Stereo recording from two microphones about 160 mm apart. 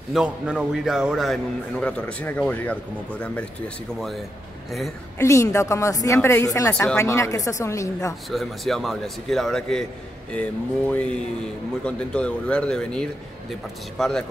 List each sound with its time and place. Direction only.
0.1 s a man's voice: 5° right (ahead or behind)
5.2 s a woman's voice: 20° left (ahead or behind)
8.3 s a man's voice: centre (ahead or behind)